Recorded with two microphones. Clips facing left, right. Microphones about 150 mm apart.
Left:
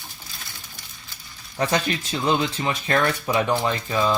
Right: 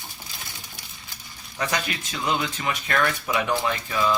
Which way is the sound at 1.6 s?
30° left (ahead or behind).